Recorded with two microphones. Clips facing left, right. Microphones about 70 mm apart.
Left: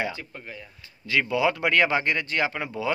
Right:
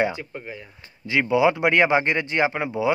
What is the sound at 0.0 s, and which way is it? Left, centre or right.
Speech, centre.